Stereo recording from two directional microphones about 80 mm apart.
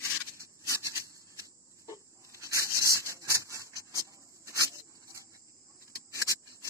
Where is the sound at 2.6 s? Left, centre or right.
Right.